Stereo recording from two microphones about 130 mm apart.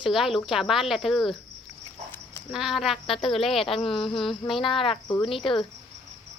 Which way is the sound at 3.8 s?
40° left (ahead or behind).